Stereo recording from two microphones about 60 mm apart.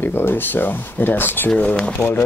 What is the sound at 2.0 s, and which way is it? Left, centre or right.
Speech, left.